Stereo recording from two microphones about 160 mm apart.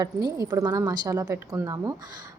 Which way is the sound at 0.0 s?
25° right (ahead or behind).